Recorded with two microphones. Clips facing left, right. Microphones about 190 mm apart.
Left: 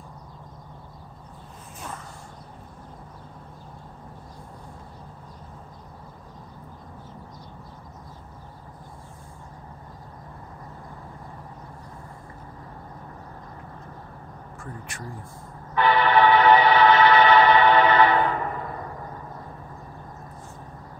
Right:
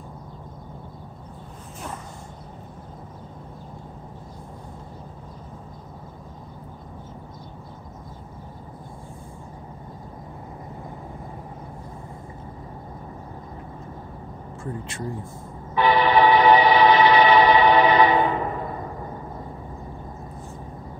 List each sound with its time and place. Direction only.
14.6 s speech: 25° right (ahead or behind)
15.7 s train: 10° right (ahead or behind)